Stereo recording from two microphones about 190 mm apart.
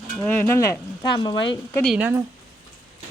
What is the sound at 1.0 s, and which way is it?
Speech, 20° left (ahead or behind).